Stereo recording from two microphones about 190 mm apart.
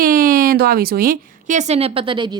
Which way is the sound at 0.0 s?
50° right (ahead or behind).